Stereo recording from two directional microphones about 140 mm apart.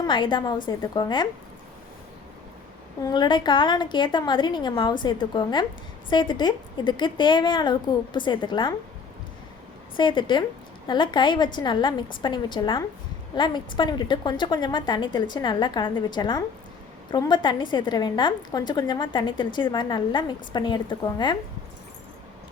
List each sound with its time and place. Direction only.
0.0 s a woman's voice: 35° left (ahead or behind)
3.0 s a woman's voice: 30° left (ahead or behind)
10.0 s a woman's voice: 35° left (ahead or behind)